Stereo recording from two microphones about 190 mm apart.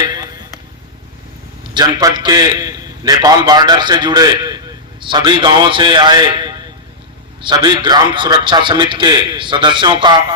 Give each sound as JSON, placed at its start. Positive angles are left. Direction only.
{"t": 1.7, "sound": "a man's voice", "side_deg": -20}